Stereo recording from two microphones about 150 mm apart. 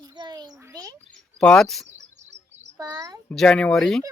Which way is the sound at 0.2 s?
30° right (ahead or behind).